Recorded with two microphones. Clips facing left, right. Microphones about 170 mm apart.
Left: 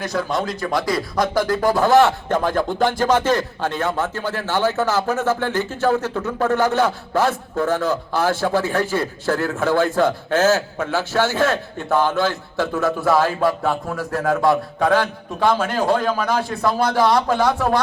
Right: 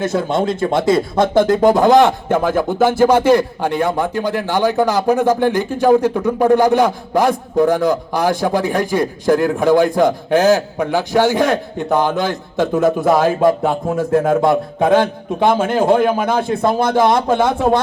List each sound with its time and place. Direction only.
0.0 s a man's voice: 25° right (ahead or behind)